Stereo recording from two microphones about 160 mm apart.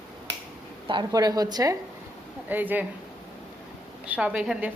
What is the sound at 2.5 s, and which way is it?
Speech, 10° right (ahead or behind).